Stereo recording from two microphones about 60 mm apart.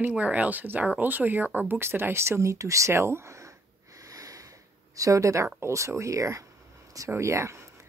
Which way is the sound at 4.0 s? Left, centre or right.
Right.